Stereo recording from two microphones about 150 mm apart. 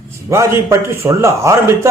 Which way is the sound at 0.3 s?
20° right (ahead or behind).